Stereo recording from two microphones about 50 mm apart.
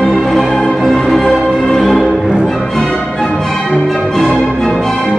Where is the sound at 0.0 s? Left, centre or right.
Centre.